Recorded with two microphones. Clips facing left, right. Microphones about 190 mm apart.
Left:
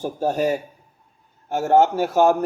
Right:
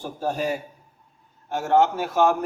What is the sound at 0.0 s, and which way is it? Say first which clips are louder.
A man's voice: left 5 dB; 45° left (ahead or behind).